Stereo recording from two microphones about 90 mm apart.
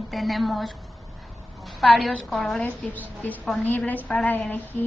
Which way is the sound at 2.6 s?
20° left (ahead or behind).